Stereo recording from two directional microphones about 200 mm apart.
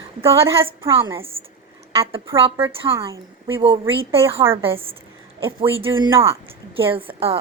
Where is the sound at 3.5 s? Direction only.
25° right (ahead or behind).